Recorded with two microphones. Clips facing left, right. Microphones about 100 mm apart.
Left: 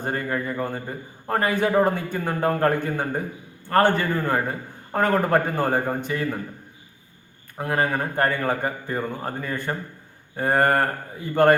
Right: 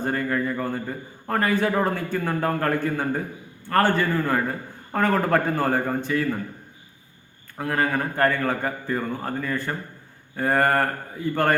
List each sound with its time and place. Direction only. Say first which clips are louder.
0.0 s a man's voice: right 2 dB; 25° left (ahead or behind)
7.6 s a man's voice: even; 25° left (ahead or behind)